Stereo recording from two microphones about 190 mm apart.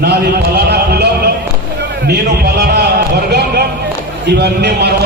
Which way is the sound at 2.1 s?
55° right (ahead or behind).